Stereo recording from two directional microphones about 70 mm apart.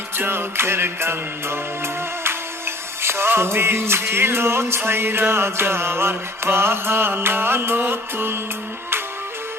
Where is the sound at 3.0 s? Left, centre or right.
Right.